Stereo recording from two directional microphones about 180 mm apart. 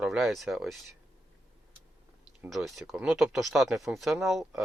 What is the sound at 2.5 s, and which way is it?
Speech, centre (ahead or behind).